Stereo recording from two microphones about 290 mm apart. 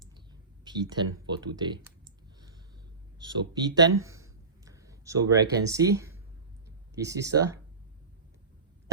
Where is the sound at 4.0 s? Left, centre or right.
Centre.